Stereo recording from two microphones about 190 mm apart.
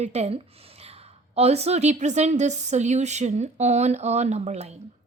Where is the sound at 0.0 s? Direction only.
35° right (ahead or behind).